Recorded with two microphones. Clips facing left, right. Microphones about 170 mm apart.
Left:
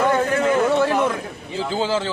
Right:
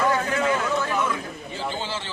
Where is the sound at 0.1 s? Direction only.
50° left (ahead or behind).